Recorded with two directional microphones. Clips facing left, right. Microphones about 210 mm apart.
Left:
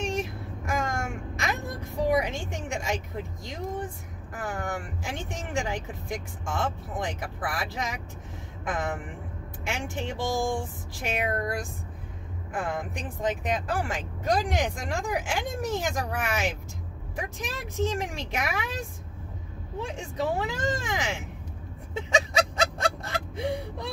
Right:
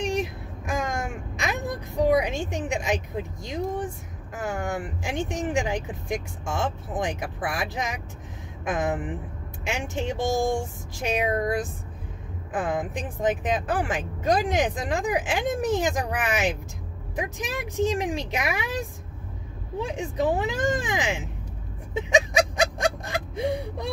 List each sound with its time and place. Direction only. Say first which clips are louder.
0.0 s vehicle: right 3 dB; 15° right (ahead or behind)
4.4 s speech: right 4 dB; 20° right (ahead or behind)
12.5 s speech: right 4 dB; 20° right (ahead or behind)
19.9 s speech: right 5 dB; 15° right (ahead or behind)
21.9 s a sound: right 4 dB; 15° right (ahead or behind)